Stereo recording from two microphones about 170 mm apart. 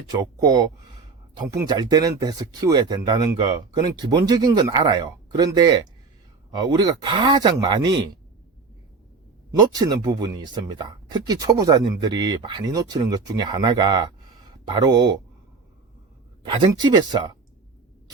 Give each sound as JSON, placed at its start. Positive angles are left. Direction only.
{"t": 0.1, "sound": "speech", "side_deg": -20}
{"t": 9.5, "sound": "speech", "side_deg": -20}
{"t": 16.4, "sound": "speech", "side_deg": -30}